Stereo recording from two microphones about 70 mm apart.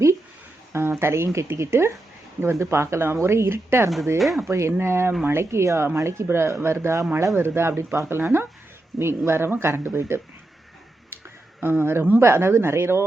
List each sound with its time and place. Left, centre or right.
0.7 s speech: right
4.2 s speech: centre
4.4 s speech: right
11.6 s speech: right